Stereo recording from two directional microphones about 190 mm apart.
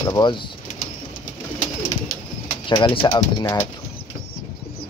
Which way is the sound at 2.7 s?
25° left (ahead or behind).